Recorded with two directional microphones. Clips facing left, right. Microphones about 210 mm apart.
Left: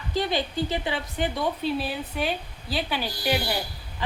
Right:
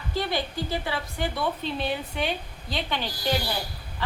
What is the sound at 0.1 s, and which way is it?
Speech, 20° left (ahead or behind).